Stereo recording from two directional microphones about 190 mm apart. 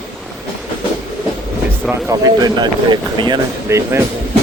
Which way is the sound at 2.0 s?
20° right (ahead or behind).